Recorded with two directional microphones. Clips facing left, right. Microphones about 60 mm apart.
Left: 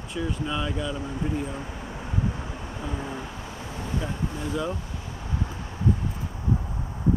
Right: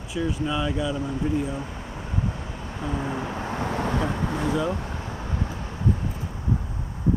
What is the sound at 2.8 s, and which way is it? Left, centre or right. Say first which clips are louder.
Vehicle: right 6 dB; right.